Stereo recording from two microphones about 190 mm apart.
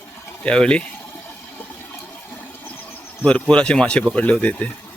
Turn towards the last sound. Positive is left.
turn(degrees=5)  # may be behind; listen again after turning